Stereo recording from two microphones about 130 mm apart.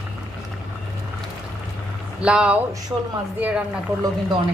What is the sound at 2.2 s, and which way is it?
Speech, 10° right (ahead or behind).